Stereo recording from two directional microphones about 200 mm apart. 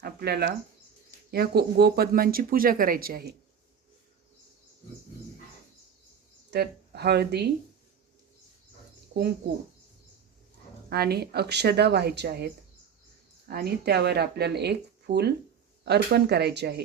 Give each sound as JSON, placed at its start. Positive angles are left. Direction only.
{"t": 0.0, "sound": "bird", "side_deg": -50}
{"t": 1.3, "sound": "speech", "side_deg": -50}
{"t": 6.5, "sound": "speech", "side_deg": -55}
{"t": 10.8, "sound": "speech", "side_deg": -50}
{"t": 13.5, "sound": "speech", "side_deg": -50}